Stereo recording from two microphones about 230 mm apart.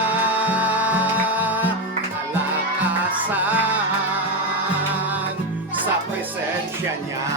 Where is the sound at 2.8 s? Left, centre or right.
Centre.